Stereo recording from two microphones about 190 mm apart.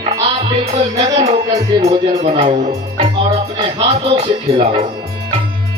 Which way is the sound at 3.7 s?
30° right (ahead or behind).